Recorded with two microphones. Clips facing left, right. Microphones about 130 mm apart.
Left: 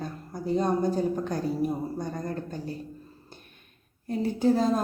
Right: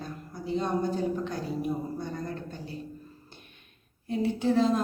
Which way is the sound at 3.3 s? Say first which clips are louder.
Left 2 dB; 40° left (ahead or behind).